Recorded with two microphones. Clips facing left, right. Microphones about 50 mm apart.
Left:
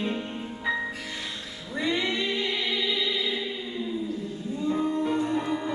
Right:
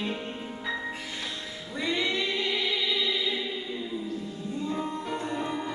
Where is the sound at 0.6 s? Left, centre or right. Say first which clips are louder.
Left 5 dB; centre.